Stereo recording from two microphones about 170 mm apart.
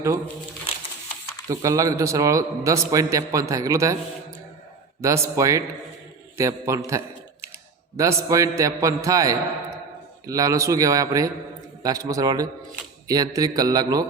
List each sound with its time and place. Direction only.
1.5 s a man's voice: 20° right (ahead or behind)
4.9 s a man's voice: 15° right (ahead or behind)